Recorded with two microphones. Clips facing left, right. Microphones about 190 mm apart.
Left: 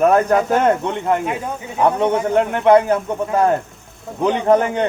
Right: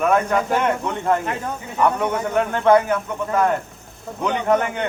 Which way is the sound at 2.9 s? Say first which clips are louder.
Left 3 dB; 35° left (ahead or behind).